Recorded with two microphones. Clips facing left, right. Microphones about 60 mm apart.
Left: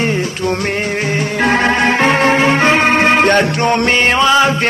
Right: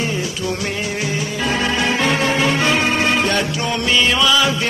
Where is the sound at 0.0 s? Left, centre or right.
Left.